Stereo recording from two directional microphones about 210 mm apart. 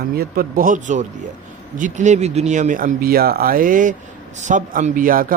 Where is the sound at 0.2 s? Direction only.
45° right (ahead or behind).